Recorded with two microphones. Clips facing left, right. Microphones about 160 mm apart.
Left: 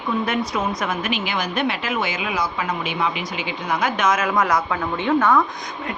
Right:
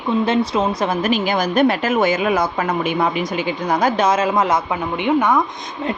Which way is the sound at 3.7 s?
35° right (ahead or behind).